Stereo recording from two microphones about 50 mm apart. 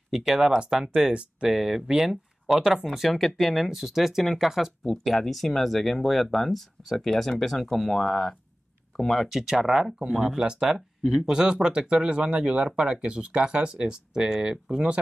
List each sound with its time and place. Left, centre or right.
0.1 s speech: centre
11.3 s speech: centre